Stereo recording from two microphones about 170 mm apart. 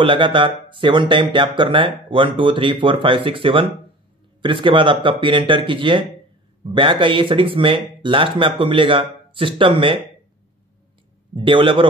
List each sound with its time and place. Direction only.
0.0 s speech: 30° right (ahead or behind)
11.3 s a man's voice: 30° right (ahead or behind)